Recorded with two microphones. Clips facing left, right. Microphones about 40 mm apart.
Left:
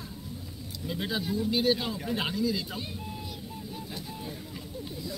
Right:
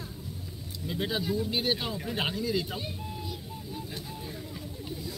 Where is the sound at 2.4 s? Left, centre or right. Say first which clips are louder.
Left 1 dB; right.